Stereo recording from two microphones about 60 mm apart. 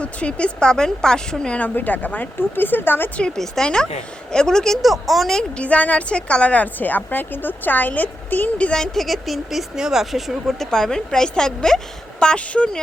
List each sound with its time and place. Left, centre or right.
0.0 s a woman's voice: centre
1.5 s a woman's voice: left
3.2 s a woman's voice: centre
4.8 s speech: centre
5.4 s a woman's voice: left
8.8 s speech: centre
10.7 s a woman's voice: centre